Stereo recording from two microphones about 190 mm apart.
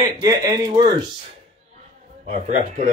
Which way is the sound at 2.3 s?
40° right (ahead or behind).